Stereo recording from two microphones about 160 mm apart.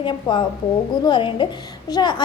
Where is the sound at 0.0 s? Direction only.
30° left (ahead or behind).